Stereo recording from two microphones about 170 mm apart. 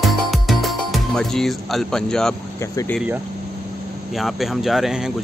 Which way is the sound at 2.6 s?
15° left (ahead or behind).